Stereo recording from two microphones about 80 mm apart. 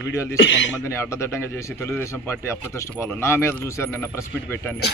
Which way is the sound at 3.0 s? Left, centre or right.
Left.